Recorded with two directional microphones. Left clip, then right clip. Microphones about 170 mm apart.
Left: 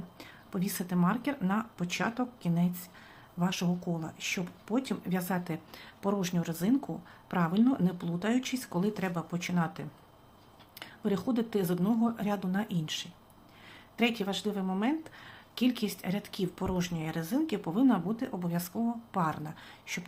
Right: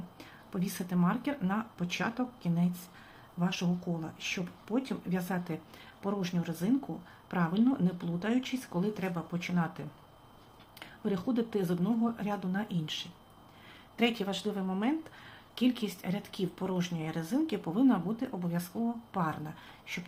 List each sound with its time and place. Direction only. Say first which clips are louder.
0.2 s speech: left 2 dB; 15° left (ahead or behind)